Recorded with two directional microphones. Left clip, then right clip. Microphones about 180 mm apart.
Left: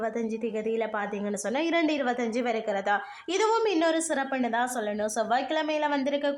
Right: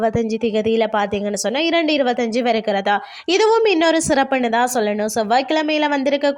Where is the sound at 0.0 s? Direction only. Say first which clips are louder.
Right 11 dB; 35° right (ahead or behind).